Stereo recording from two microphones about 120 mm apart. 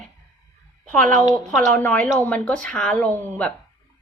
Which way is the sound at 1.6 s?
15° left (ahead or behind).